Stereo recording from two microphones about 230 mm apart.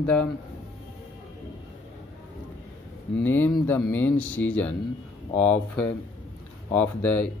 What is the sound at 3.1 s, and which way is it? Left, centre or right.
Speech, centre.